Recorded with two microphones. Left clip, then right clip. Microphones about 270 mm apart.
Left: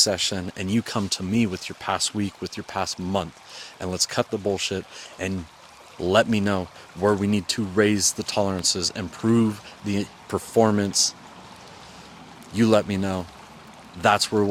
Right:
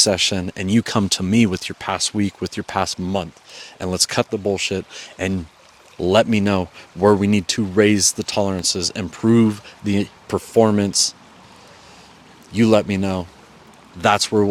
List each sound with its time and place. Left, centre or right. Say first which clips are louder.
0.0 s speech: right 5 dB; right
1.9 s speech: right 3 dB; right
3.1 s speech: right 2 dB; right
4.3 s speech: right 4 dB; right
4.9 s speech: right 6 dB; right
6.0 s speech: right 4 dB; right
10.3 s speech: right 4 dB; right
12.5 s speech: right 4 dB; right